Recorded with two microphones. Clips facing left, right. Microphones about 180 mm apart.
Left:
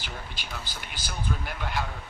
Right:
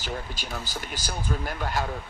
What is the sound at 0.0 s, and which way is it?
Speech, 40° right (ahead or behind).